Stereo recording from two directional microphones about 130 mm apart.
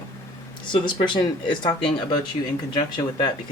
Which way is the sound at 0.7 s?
35° left (ahead or behind).